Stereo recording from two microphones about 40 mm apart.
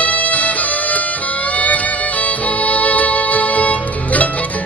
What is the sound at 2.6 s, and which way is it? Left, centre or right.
Music, left.